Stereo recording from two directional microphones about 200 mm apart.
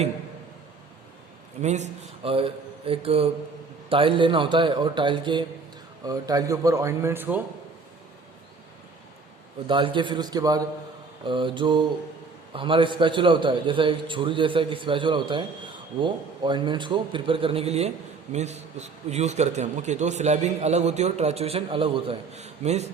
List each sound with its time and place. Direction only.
1.6 s a man's voice: 35° right (ahead or behind); by 7.4 s 10° right (ahead or behind)
9.6 s a man's voice: 25° right (ahead or behind)